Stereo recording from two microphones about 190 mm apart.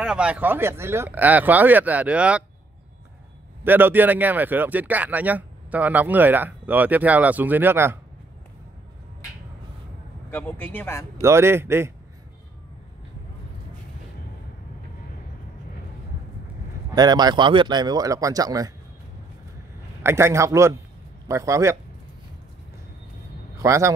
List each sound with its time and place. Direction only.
0.0 s speech: 5° right (ahead or behind)
3.6 s speech: 10° right (ahead or behind)
10.3 s a man's voice: 10° left (ahead or behind)
11.1 s speech: 15° right (ahead or behind)
16.9 s speech: 20° right (ahead or behind)
20.0 s speech: 15° right (ahead or behind)
23.6 s speech: 15° right (ahead or behind)